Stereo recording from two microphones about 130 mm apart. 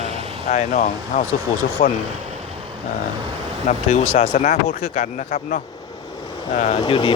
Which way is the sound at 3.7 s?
55° left (ahead or behind).